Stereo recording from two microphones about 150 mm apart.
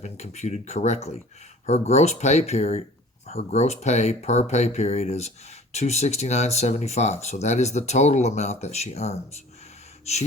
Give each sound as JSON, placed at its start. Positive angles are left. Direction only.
{"t": 0.0, "sound": "speech", "side_deg": 50}